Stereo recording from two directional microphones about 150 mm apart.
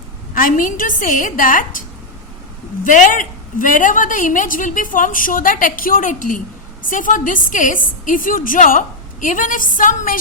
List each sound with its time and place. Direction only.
0.3 s a woman's voice: 65° left (ahead or behind)
2.8 s a woman's voice: 60° left (ahead or behind)